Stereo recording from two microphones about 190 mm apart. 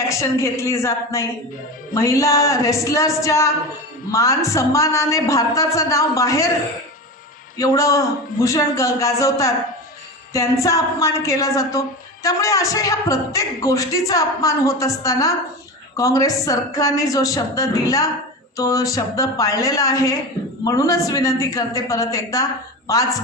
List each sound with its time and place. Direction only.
0.1 s speech: 15° left (ahead or behind)
7.5 s speech: 20° left (ahead or behind)